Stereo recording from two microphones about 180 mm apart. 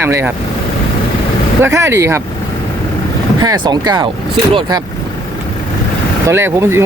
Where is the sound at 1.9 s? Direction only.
15° right (ahead or behind).